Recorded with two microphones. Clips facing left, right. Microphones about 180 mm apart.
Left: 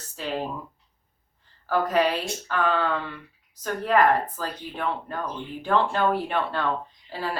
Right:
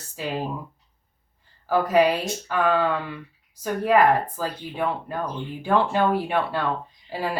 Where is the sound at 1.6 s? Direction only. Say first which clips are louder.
Right 4 dB; 10° right (ahead or behind).